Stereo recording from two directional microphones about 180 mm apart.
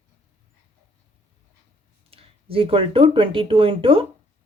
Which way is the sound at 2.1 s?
30° right (ahead or behind).